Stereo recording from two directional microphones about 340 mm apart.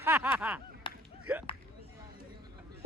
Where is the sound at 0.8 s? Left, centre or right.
Centre.